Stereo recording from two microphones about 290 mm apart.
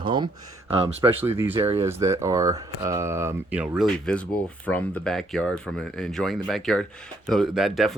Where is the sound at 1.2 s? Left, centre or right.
Centre.